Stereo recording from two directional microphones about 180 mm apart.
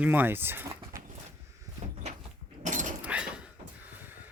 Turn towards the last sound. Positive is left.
turn(degrees=-5)  # may be behind; listen again after turning